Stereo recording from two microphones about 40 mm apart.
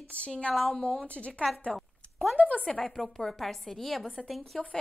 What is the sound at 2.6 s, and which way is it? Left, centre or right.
A woman's voice, centre.